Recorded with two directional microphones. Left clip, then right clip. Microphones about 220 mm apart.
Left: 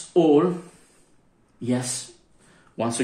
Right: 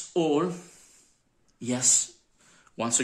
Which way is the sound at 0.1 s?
35° right (ahead or behind).